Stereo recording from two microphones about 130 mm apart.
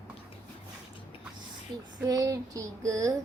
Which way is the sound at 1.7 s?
35° right (ahead or behind).